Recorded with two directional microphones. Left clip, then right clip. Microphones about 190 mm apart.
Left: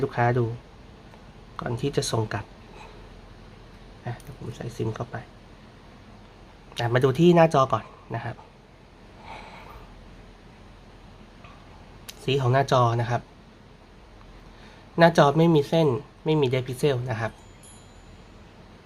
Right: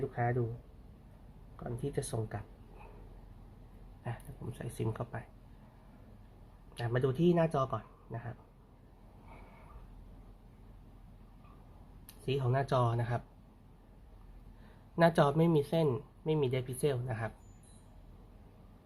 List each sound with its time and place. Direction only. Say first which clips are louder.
0.0 s speech: left 11 dB; 15° left (ahead or behind)
1.5 s speech: left 11 dB; 15° left (ahead or behind)
4.5 s speech: left 8 dB; 10° right (ahead or behind)
6.7 s speech: left 11 dB; 10° left (ahead or behind)
12.2 s speech: left 11 dB; 10° left (ahead or behind)
14.9 s speech: left 10 dB; 5° left (ahead or behind)